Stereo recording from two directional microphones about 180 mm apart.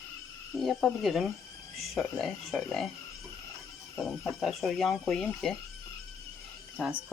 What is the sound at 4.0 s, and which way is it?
Speech, centre (ahead or behind).